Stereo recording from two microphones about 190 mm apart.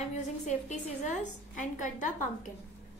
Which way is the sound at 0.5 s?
35° left (ahead or behind).